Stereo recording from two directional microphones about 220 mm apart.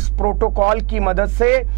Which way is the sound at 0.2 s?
15° right (ahead or behind).